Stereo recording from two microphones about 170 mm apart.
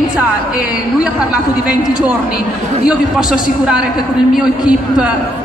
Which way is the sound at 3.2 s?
5° right (ahead or behind).